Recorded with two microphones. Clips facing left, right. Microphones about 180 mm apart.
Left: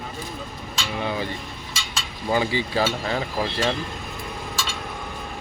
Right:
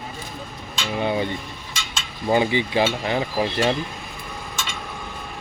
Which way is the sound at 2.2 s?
20° right (ahead or behind).